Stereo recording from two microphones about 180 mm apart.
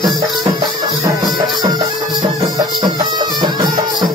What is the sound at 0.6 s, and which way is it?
Music, 25° right (ahead or behind).